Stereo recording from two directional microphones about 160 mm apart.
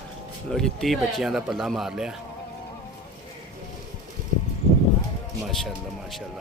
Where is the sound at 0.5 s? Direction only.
5° left (ahead or behind).